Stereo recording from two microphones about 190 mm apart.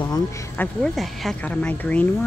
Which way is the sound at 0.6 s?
5° left (ahead or behind).